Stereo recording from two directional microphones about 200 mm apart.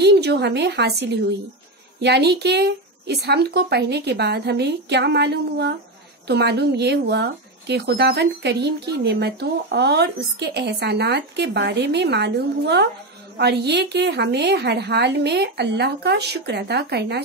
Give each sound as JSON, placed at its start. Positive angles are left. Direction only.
{"t": 0.0, "sound": "a woman's voice", "side_deg": -55}